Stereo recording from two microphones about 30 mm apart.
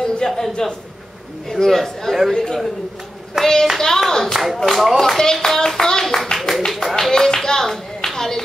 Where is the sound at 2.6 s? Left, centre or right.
Centre.